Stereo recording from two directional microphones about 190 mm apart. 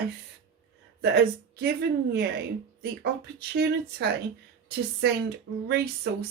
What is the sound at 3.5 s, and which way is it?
Speech, 60° right (ahead or behind).